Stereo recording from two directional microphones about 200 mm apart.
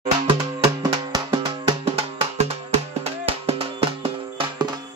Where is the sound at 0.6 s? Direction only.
20° right (ahead or behind).